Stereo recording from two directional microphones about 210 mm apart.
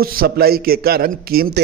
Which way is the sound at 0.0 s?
45° right (ahead or behind).